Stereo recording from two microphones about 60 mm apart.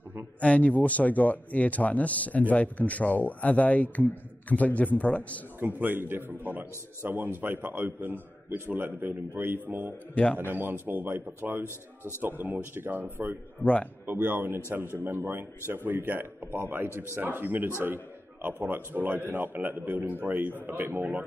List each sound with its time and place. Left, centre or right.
0.4 s a man's voice: left
5.6 s a man's voice: right
13.6 s a man's voice: left
14.0 s a man's voice: right